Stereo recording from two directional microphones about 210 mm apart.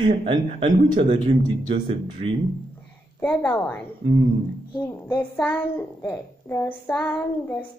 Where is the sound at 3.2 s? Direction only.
5° left (ahead or behind).